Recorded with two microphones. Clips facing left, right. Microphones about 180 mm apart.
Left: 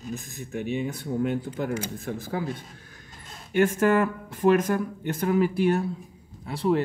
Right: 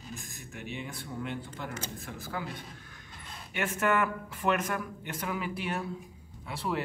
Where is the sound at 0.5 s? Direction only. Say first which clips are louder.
Left 11 dB; 50° left (ahead or behind).